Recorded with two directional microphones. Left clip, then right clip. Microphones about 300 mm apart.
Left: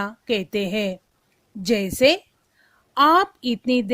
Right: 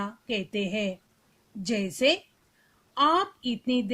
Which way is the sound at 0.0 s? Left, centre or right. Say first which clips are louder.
Left 7 dB; left.